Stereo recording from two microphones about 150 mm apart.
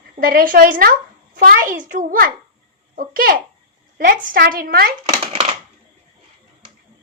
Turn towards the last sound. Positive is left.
turn(degrees=-45)  # may be behind; listen again after turning